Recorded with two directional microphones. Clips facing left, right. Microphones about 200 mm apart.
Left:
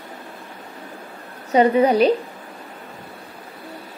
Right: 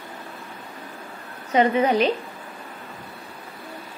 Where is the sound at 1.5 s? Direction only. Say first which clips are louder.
Left 4 dB; 35° left (ahead or behind).